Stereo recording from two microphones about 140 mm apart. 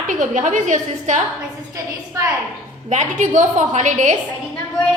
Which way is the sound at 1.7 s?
20° right (ahead or behind).